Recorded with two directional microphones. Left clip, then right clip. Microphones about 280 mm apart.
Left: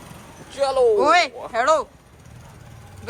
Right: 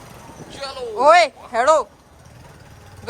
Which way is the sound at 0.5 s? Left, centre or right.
Centre.